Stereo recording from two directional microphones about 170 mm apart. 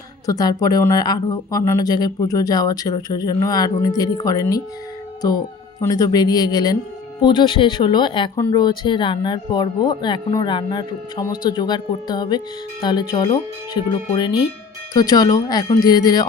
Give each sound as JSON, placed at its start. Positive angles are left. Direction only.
{"t": 0.3, "sound": "speech", "side_deg": 20}
{"t": 5.8, "sound": "speech", "side_deg": 20}